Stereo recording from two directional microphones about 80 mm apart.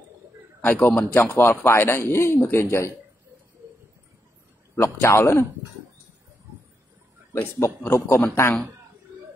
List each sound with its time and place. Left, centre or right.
0.6 s a man's voice: centre
4.7 s speech: left
7.5 s speech: left